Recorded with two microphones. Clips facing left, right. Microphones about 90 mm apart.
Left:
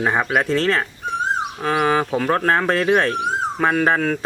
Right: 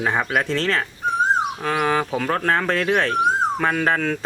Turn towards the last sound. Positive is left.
turn(degrees=10)  # may be behind; listen again after turning